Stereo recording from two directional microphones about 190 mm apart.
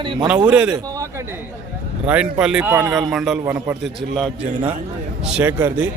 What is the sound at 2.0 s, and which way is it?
A man's voice, 5° right (ahead or behind).